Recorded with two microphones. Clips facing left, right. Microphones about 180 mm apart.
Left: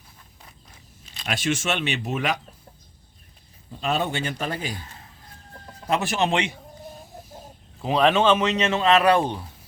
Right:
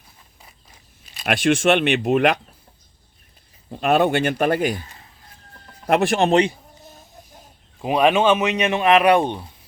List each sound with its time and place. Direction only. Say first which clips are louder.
1.2 s speech: right 8 dB; 60° right (ahead or behind)
3.7 s speech: right 8 dB; 60° right (ahead or behind)
5.9 s speech: right 6 dB; 60° right (ahead or behind)
7.8 s speech: right 2 dB; 15° right (ahead or behind)